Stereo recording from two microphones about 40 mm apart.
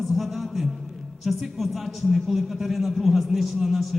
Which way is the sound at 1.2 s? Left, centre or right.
Centre.